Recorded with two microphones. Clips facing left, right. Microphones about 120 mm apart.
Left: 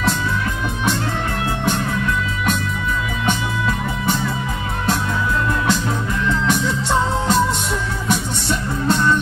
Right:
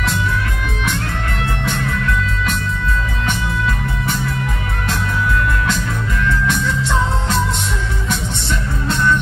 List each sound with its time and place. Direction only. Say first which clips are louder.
8.8 s music: left 1 dB; 30° left (ahead or behind)